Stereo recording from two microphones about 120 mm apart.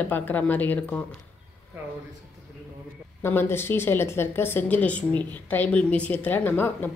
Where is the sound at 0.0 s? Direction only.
15° left (ahead or behind).